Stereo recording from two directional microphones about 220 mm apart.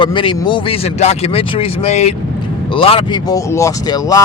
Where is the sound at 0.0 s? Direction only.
20° left (ahead or behind).